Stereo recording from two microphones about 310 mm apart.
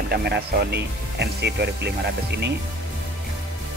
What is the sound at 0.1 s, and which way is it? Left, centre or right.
Speech, right.